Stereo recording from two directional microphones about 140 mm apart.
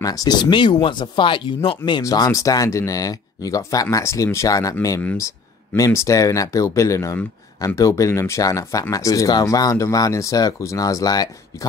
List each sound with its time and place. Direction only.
0.0 s speech: 25° left (ahead or behind)